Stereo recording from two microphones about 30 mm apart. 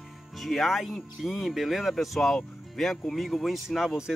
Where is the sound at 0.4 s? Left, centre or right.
Centre.